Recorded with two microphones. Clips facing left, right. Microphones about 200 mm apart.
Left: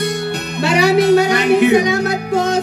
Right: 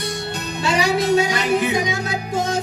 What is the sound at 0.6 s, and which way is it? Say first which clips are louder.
Music: left 7 dB; 65° left (ahead or behind).